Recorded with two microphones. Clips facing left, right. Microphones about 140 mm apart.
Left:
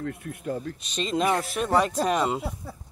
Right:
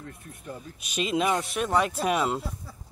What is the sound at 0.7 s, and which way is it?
Speech, 10° right (ahead or behind).